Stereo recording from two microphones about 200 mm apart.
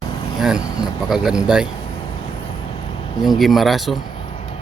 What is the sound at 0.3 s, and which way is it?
Speech, centre (ahead or behind).